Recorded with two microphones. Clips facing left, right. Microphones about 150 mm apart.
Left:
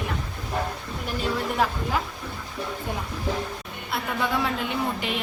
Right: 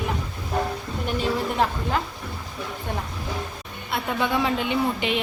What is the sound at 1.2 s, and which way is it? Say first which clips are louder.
Speech: right 1 dB; centre (ahead or behind).